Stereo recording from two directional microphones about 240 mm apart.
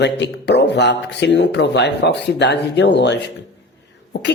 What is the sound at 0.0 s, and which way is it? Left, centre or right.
Speech, left.